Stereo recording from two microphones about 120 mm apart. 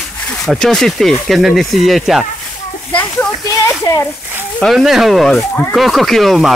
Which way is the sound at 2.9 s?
10° left (ahead or behind).